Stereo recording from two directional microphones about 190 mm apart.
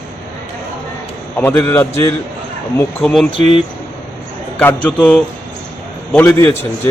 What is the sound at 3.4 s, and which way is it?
Speech, 35° right (ahead or behind).